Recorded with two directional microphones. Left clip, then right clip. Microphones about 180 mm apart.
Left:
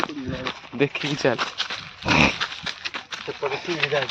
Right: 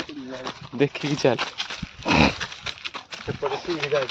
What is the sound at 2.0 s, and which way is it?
Dog, 30° right (ahead or behind).